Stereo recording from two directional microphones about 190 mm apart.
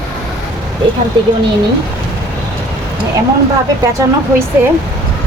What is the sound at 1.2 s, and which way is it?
Speech, 25° right (ahead or behind).